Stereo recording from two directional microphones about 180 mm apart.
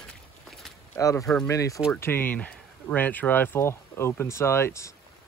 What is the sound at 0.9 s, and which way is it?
Speech, 15° left (ahead or behind).